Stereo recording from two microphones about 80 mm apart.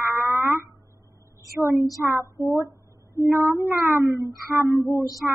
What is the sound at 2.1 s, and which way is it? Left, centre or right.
Child singing, right.